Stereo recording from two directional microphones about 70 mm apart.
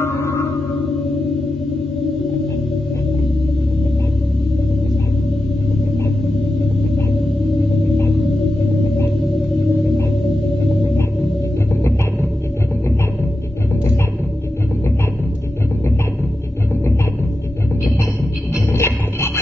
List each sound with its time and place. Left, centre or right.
0.0 s music: left
10.7 s music: centre
18.7 s a sound: left